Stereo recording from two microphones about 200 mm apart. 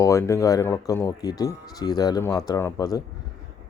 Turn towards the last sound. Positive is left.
turn(degrees=20)  # may be behind; listen again after turning